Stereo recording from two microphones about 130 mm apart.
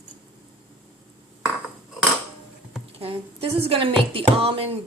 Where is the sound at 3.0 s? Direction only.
50° right (ahead or behind).